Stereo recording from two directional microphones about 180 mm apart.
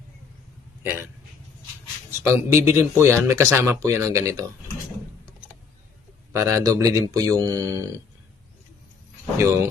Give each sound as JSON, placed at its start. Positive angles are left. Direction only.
{"t": 2.0, "sound": "speech", "side_deg": -15}
{"t": 6.3, "sound": "speech", "side_deg": -15}
{"t": 9.4, "sound": "speech", "side_deg": -15}